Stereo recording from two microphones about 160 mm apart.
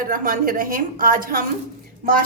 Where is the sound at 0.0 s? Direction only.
60° right (ahead or behind).